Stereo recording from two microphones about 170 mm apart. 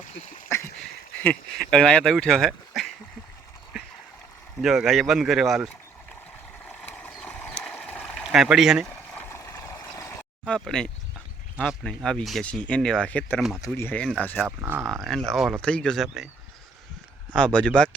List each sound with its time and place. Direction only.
0.0 s a sound: 50° left (ahead or behind)
0.4 s a sound: 15° left (ahead or behind)
1.2 s speech: 5° left (ahead or behind)
4.6 s speech: 5° right (ahead or behind)
6.7 s stream: 10° left (ahead or behind)
8.9 s a sound: 10° left (ahead or behind)
10.4 s speech: 5° left (ahead or behind)
14.4 s speech: 15° right (ahead or behind)
15.0 s speech: centre (ahead or behind)
17.3 s speech: 5° left (ahead or behind)